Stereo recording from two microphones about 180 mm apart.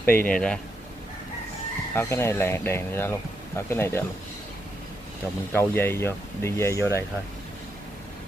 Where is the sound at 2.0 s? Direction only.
15° left (ahead or behind).